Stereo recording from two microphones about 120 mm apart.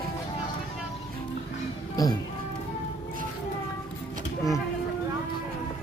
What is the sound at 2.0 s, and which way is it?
Speech, 30° left (ahead or behind).